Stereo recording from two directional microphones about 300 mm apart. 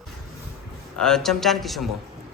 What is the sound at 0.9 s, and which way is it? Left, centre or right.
Speech, centre.